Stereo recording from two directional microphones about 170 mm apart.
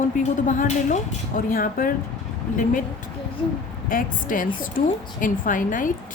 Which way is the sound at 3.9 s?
55° left (ahead or behind).